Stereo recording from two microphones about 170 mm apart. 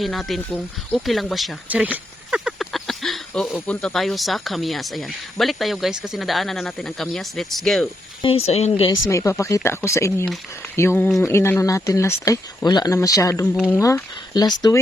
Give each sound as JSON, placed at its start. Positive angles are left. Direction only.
{"t": 0.0, "sound": "speech", "side_deg": 0}
{"t": 8.2, "sound": "speech", "side_deg": 35}
{"t": 9.0, "sound": "speech", "side_deg": 20}
{"t": 13.4, "sound": "speech", "side_deg": 10}